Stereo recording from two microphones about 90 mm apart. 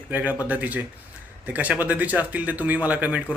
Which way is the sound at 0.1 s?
20° right (ahead or behind).